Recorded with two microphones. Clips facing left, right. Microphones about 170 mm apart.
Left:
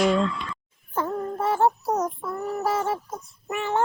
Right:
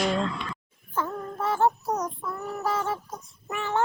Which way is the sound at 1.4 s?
30° left (ahead or behind).